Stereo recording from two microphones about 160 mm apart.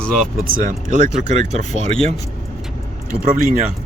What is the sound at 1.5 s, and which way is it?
Speech, 40° right (ahead or behind).